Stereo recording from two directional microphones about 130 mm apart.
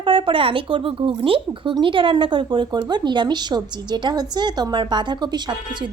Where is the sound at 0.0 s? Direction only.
40° right (ahead or behind).